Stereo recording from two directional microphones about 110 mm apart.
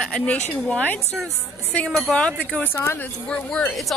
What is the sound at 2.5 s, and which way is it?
Speech, 20° left (ahead or behind).